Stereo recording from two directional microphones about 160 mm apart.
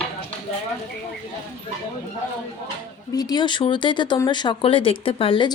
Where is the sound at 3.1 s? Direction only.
25° left (ahead or behind).